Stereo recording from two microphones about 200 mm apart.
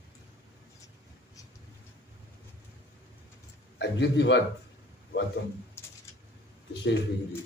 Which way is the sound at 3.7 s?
60° left (ahead or behind).